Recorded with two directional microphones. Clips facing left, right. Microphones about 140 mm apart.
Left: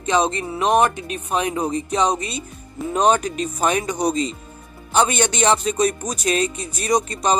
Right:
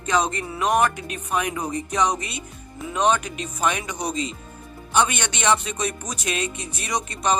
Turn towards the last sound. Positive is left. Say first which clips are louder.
# left 5 dB
turn(degrees=35)  # may be behind; listen again after turning